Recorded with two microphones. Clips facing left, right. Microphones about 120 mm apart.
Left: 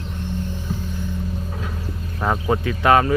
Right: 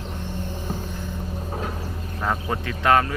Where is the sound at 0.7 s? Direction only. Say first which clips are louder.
Left 1 dB; 45° right (ahead or behind).